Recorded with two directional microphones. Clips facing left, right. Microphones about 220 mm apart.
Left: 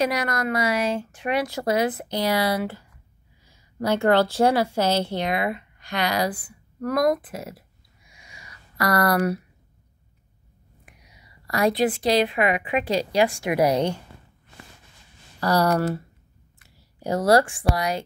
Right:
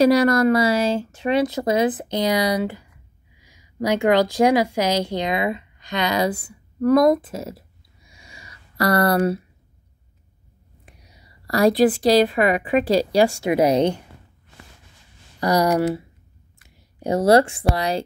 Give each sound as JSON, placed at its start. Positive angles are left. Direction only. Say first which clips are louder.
{"t": 0.0, "sound": "a woman's voice", "louder": "right 9 dB", "side_deg": -30}
{"t": 10.9, "sound": "a woman's voice", "louder": "right 3 dB", "side_deg": -35}
{"t": 15.4, "sound": "speech", "louder": "right 3 dB", "side_deg": -15}